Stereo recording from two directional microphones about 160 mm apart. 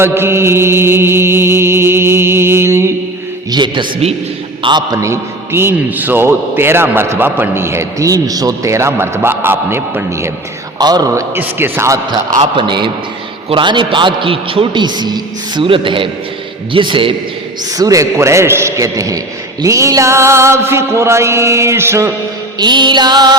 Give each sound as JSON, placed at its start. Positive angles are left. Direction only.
{"t": 0.0, "sound": "mantra", "side_deg": -15}
{"t": 3.5, "sound": "a man's voice", "side_deg": -30}
{"t": 10.8, "sound": "a man's voice", "side_deg": -25}
{"t": 12.4, "sound": "a man's voice", "side_deg": -30}
{"t": 17.7, "sound": "a man's voice", "side_deg": -20}
{"t": 22.5, "sound": "a man's voice", "side_deg": -25}